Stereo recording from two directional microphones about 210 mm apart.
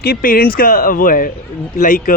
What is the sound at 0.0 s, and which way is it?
A man's voice, 45° left (ahead or behind).